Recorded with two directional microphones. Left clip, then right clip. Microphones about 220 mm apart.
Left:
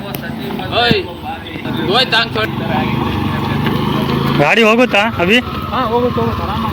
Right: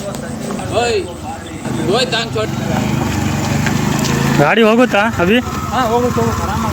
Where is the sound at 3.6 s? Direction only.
25° right (ahead or behind).